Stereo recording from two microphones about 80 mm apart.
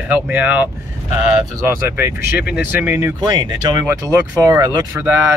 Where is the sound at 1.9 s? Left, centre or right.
Right.